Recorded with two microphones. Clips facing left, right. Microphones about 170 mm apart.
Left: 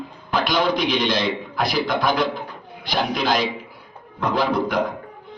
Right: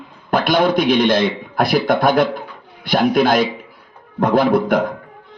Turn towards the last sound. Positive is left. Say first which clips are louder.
# right 6 dB
turn(degrees=-50)  # may be behind; listen again after turning